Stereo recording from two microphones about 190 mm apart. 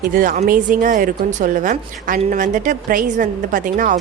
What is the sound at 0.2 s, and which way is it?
A woman's voice, 45° right (ahead or behind).